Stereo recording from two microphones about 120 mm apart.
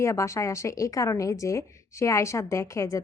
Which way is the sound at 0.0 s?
25° left (ahead or behind).